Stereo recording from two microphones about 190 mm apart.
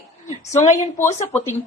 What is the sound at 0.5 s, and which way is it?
Speech, 15° left (ahead or behind).